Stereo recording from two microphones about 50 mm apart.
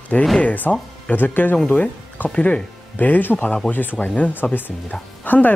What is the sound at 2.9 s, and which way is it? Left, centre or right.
Speech, left.